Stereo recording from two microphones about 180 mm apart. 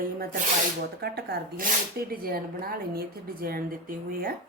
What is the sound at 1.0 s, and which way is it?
A woman's voice, 65° right (ahead or behind).